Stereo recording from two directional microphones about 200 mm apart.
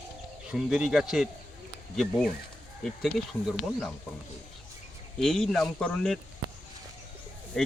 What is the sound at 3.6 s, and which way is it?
Speech, centre (ahead or behind).